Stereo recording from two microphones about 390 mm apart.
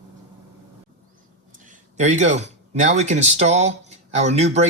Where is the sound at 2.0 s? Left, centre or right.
Centre.